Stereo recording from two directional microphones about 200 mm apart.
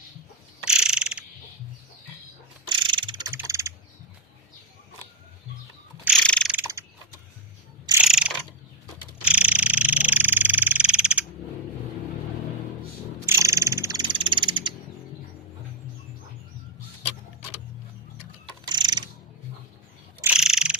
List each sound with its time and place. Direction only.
0.6 s mechanisms: 5° right (ahead or behind)
2.6 s a sound: 25° right (ahead or behind)
6.2 s mechanisms: 5° left (ahead or behind)
6.5 s mechanisms: 10° right (ahead or behind)
8.0 s mechanisms: 5° right (ahead or behind)
9.2 s frog: 5° right (ahead or behind)
13.2 s frog: 15° right (ahead or behind)
18.7 s mechanisms: 20° right (ahead or behind)
20.2 s mechanisms: 5° right (ahead or behind)